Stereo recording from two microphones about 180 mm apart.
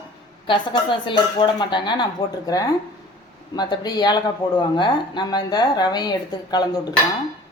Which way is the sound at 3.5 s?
25° left (ahead or behind).